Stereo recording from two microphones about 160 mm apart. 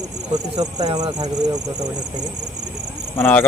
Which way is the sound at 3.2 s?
10° left (ahead or behind).